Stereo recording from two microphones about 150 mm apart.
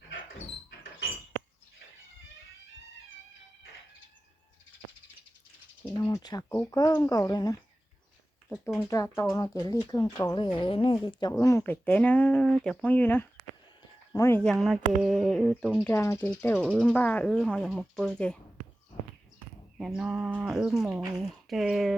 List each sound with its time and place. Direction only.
6.0 s speech: 20° left (ahead or behind)
8.4 s speech: 5° left (ahead or behind)
8.9 s speech: 20° left (ahead or behind)
14.4 s speech: centre (ahead or behind)
15.9 s speech: 20° left (ahead or behind); by 18.3 s 5° left (ahead or behind)
19.8 s speech: 5° right (ahead or behind)